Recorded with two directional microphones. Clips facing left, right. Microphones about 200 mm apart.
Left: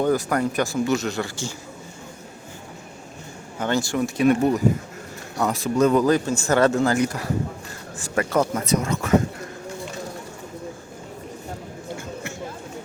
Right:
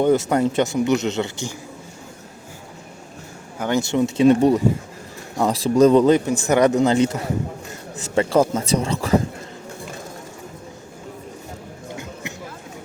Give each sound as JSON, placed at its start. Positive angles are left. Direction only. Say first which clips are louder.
{"t": 0.0, "sound": "speech", "louder": "right 4 dB", "side_deg": -25}
{"t": 3.6, "sound": "speech", "louder": "right 3 dB", "side_deg": -20}